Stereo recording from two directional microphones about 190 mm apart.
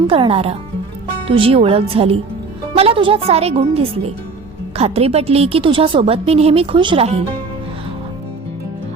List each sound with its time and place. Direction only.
0.1 s a woman's voice: 30° right (ahead or behind)